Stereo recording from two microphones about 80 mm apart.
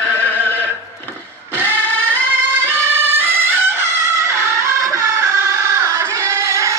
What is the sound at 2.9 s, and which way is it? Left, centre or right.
Music, right.